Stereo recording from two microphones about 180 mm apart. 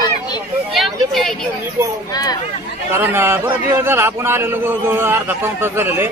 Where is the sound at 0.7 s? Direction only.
Centre (ahead or behind).